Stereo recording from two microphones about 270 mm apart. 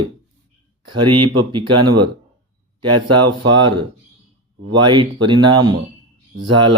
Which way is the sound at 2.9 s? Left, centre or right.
Right.